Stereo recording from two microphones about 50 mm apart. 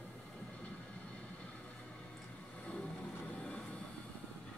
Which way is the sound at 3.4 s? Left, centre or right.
Left.